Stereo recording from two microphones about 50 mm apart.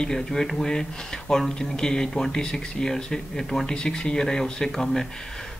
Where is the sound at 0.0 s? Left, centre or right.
Centre.